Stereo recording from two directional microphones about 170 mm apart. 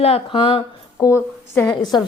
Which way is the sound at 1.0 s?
15° left (ahead or behind).